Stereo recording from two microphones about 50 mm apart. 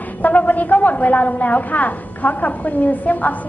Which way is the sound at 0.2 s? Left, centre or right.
Left.